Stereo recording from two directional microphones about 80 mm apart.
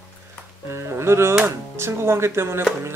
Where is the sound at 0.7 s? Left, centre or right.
Right.